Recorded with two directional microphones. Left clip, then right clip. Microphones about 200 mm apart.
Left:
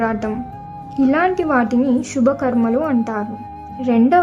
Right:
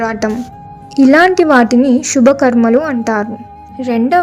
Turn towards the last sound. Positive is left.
turn(degrees=-25)  # may be behind; listen again after turning